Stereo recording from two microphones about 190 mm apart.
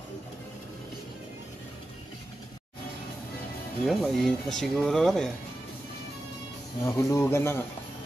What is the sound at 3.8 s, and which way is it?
Speech, centre (ahead or behind).